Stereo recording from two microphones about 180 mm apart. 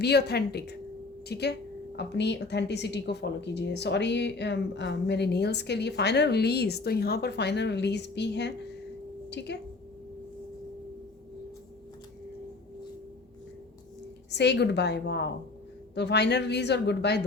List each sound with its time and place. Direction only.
0.0 s a woman's voice: 65° left (ahead or behind)
14.3 s a woman's voice: 70° left (ahead or behind)